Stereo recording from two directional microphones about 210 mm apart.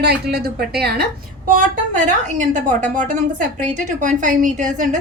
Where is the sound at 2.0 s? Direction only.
35° right (ahead or behind).